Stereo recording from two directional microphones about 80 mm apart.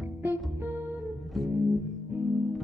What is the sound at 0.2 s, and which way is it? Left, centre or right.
Music, right.